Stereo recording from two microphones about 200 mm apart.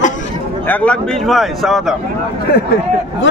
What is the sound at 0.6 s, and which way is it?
Speech, 10° left (ahead or behind).